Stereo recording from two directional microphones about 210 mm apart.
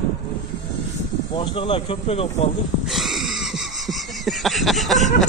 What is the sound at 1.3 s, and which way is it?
Speech, 25° left (ahead or behind).